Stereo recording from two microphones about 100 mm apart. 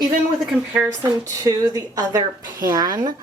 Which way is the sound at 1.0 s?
35° right (ahead or behind).